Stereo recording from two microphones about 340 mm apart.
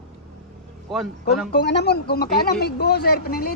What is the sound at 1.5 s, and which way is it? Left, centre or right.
Speech, left.